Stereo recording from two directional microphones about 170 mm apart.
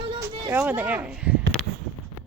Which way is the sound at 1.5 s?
5° left (ahead or behind).